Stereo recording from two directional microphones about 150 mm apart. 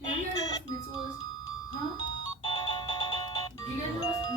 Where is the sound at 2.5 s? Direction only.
30° left (ahead or behind).